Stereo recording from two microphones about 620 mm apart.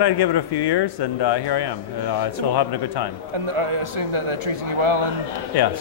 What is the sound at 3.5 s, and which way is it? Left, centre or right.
Speech, right.